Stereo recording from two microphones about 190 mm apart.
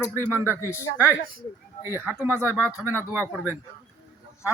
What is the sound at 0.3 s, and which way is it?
Speech, 15° left (ahead or behind).